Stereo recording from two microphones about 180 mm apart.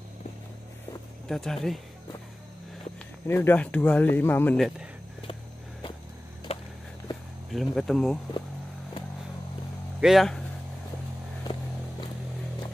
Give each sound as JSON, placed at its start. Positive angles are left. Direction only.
{"t": 1.3, "sound": "speech", "side_deg": 0}
{"t": 3.3, "sound": "speech", "side_deg": 10}
{"t": 5.2, "sound": "a sound", "side_deg": 30}
{"t": 7.5, "sound": "speech", "side_deg": 0}
{"t": 9.9, "sound": "speech", "side_deg": 0}
{"t": 11.5, "sound": "vehicle", "side_deg": 25}